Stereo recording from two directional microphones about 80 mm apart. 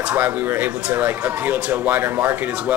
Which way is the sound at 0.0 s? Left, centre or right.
Right.